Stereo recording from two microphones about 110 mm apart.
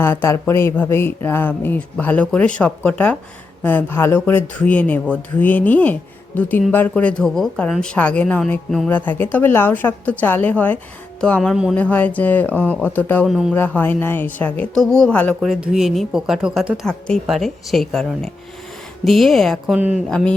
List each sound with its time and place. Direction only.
0.0 s speech: 20° left (ahead or behind)
13.2 s speech: 5° right (ahead or behind)
13.5 s speech: 15° left (ahead or behind)
14.8 s speech: 5° left (ahead or behind)
15.4 s speech: 5° right (ahead or behind)
19.7 s speech: 10° right (ahead or behind)
20.1 s speech: 5° left (ahead or behind)